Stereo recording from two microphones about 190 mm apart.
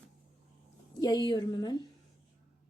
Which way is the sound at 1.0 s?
20° left (ahead or behind).